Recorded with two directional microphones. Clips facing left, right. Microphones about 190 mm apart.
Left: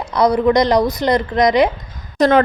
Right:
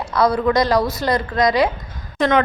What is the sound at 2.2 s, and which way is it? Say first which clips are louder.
Speech: left 4 dB; 35° left (ahead or behind).